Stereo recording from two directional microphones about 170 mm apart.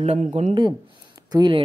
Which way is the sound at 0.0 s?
40° right (ahead or behind).